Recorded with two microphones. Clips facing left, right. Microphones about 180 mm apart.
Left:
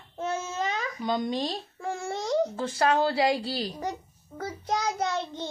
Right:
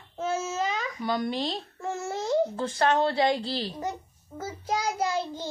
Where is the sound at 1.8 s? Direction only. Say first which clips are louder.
Even; centre (ahead or behind).